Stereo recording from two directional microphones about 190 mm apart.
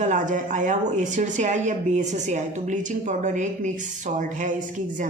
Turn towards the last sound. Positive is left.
turn(degrees=-40)  # may be behind; listen again after turning